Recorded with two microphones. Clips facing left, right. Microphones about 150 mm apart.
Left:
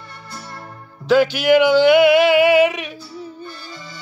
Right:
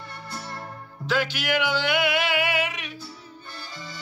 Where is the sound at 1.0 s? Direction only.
10° left (ahead or behind).